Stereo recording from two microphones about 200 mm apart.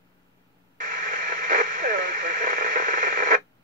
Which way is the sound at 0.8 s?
40° right (ahead or behind).